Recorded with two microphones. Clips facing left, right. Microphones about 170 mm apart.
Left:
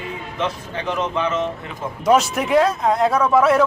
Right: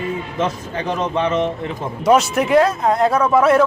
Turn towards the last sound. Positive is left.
turn(degrees=0)  # may be behind; listen again after turning